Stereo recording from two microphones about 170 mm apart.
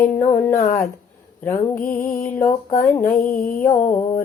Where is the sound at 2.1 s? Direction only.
55° left (ahead or behind).